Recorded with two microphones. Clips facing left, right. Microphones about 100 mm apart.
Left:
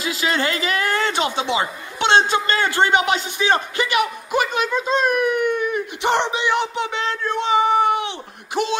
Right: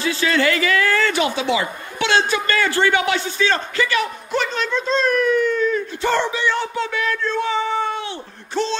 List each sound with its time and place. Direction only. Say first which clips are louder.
0.0 s speech: right 3 dB; 20° left (ahead or behind)